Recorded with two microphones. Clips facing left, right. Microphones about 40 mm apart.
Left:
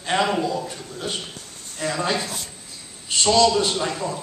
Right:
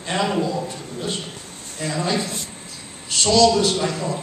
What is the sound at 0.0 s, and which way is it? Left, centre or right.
Speech, centre.